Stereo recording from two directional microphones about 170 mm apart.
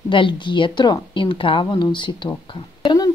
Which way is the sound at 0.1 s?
30° left (ahead or behind).